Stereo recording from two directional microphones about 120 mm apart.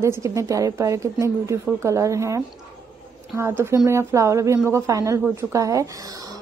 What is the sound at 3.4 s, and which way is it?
A woman's voice, 20° right (ahead or behind).